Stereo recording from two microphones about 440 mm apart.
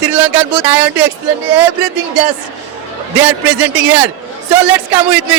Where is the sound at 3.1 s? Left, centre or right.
Centre.